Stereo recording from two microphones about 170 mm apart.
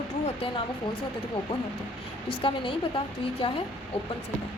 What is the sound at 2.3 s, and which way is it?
A woman's voice, 30° left (ahead or behind).